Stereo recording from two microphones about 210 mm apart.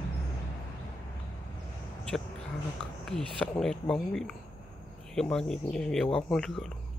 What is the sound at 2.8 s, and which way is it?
Speech, 5° left (ahead or behind).